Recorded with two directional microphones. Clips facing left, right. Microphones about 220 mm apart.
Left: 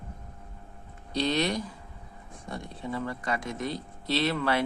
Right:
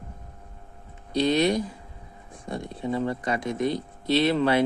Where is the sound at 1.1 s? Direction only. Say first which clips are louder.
Right 6 dB; 15° right (ahead or behind).